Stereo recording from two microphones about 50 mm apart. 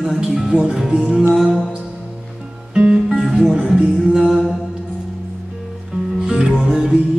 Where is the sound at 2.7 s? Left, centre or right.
Centre.